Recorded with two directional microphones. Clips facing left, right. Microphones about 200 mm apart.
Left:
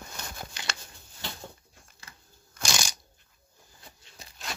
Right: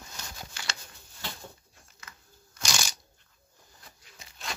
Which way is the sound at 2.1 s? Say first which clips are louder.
Right 2 dB; 30° left (ahead or behind).